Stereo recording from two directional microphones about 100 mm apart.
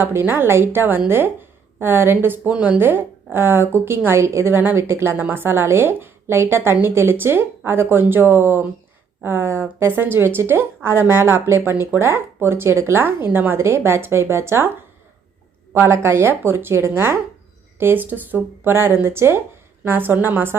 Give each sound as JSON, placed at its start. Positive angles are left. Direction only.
{"t": 0.0, "sound": "a woman's voice", "side_deg": -20}
{"t": 15.7, "sound": "a woman's voice", "side_deg": -25}